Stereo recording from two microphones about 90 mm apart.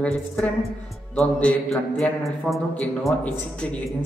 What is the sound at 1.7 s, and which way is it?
A man's voice, centre (ahead or behind).